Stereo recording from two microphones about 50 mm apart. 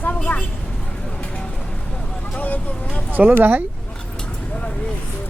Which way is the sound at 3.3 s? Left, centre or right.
Right.